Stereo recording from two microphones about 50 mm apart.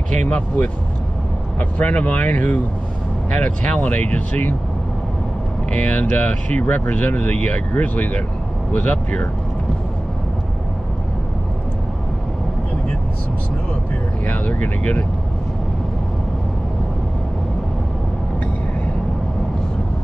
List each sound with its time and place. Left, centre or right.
1.6 s speech: left
5.7 s speech: left
14.2 s speech: left